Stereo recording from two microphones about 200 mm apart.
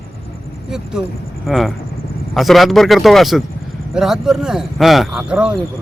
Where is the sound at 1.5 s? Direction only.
Centre (ahead or behind).